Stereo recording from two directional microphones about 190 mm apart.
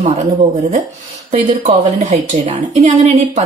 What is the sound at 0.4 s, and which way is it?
A woman's voice, 40° right (ahead or behind).